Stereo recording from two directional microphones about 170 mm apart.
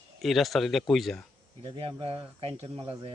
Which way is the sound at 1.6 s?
30° right (ahead or behind).